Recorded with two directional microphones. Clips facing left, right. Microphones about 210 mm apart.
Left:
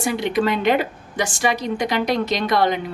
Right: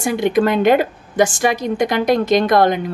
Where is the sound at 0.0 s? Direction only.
50° right (ahead or behind).